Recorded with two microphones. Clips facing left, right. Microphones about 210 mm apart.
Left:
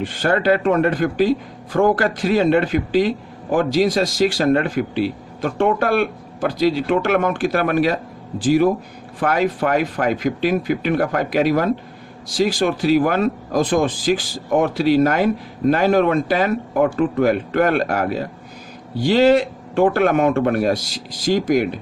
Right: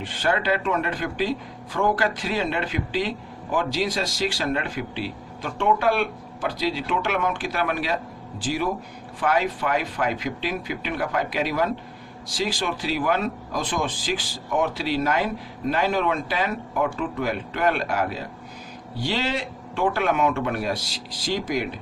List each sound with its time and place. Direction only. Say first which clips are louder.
0.0 s speech: left 6 dB; 45° left (ahead or behind)